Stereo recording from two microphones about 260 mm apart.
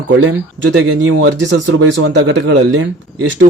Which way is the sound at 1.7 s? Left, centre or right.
Right.